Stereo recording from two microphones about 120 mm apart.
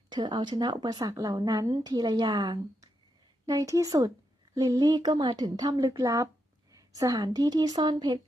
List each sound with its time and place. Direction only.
0.1 s a woman's voice: 40° right (ahead or behind)